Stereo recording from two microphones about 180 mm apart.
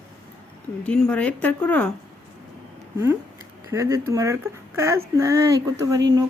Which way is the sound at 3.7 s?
15° right (ahead or behind).